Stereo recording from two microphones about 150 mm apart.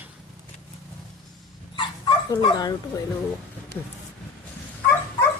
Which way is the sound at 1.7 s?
30° left (ahead or behind).